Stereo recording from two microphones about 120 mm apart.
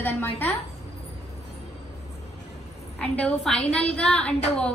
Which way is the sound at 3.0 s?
10° left (ahead or behind).